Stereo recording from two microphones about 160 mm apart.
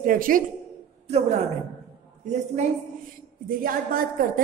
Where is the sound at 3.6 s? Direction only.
65° right (ahead or behind).